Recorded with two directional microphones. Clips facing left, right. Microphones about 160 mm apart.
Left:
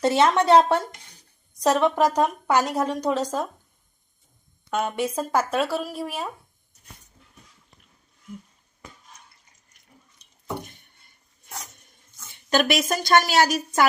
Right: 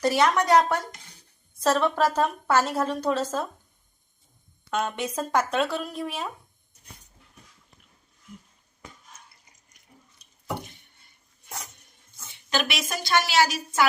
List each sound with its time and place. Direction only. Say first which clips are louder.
0.0 s speech: left 3 dB; 25° left (ahead or behind)
1.6 s a woman's voice: left 3 dB; 15° left (ahead or behind)
4.7 s a woman's voice: left 3 dB; 10° left (ahead or behind)
12.5 s a woman's voice: left 7 dB; 45° left (ahead or behind)